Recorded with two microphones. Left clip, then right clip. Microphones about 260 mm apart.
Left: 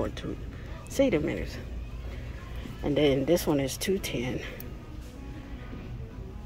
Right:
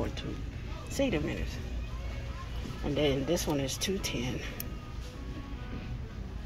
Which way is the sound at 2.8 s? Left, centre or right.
Centre.